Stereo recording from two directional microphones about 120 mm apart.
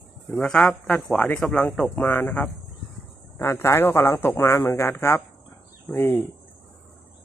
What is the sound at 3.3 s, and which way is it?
Speech, 25° left (ahead or behind).